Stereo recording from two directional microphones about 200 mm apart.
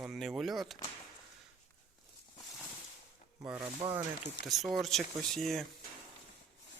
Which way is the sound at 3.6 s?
25° right (ahead or behind).